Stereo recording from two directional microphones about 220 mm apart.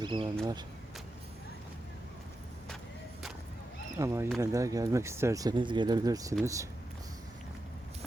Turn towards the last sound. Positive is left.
turn(degrees=-15)  # may be behind; listen again after turning